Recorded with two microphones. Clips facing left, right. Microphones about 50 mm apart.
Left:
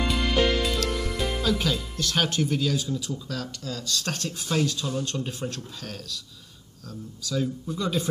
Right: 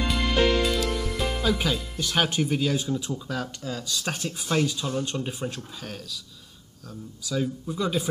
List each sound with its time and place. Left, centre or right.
0.1 s music: centre
2.0 s speech: centre